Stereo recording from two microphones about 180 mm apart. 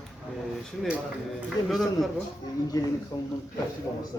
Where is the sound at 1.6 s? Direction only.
Centre (ahead or behind).